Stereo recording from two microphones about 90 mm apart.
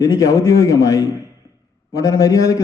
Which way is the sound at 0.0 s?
35° left (ahead or behind).